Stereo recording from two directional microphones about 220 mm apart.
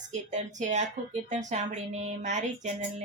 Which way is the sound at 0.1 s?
35° right (ahead or behind).